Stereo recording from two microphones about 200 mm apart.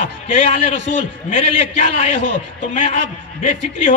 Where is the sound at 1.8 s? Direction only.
35° left (ahead or behind).